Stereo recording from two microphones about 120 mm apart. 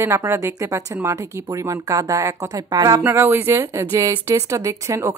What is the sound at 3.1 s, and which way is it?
Speech, 20° right (ahead or behind).